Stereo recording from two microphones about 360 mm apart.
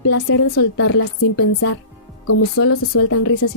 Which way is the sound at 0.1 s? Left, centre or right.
Left.